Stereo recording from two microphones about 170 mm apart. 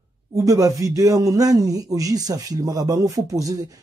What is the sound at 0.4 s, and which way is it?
Speech, 20° right (ahead or behind).